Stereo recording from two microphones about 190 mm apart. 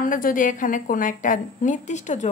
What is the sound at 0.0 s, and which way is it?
A woman's voice, 45° left (ahead or behind).